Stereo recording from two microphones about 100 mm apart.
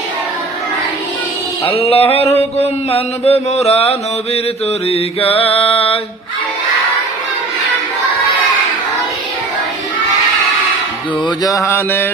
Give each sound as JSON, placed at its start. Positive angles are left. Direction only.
{"t": 1.7, "sound": "mantra", "side_deg": 75}
{"t": 4.9, "sound": "mantra", "side_deg": 80}
{"t": 11.4, "sound": "mantra", "side_deg": 30}